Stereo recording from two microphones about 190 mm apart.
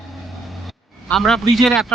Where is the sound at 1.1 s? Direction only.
Centre (ahead or behind).